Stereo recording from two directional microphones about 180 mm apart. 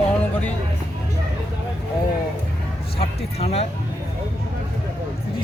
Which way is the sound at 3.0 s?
35° left (ahead or behind).